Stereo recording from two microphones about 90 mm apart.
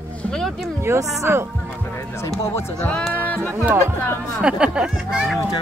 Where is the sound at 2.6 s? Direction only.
20° left (ahead or behind).